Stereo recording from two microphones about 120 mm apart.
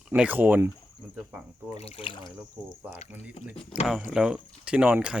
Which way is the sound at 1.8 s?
45° left (ahead or behind).